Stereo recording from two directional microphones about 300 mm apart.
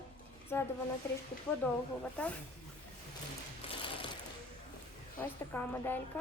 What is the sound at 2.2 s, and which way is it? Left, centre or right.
Speech, centre.